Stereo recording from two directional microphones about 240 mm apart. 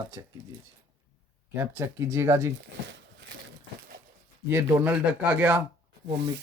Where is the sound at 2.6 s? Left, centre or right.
Right.